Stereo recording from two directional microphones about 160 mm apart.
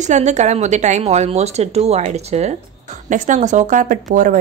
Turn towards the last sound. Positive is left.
turn(degrees=-55)  # may be behind; listen again after turning